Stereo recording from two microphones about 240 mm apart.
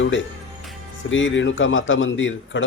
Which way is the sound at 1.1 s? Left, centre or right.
Left.